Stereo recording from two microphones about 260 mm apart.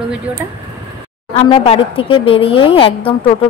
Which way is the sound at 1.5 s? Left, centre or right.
Left.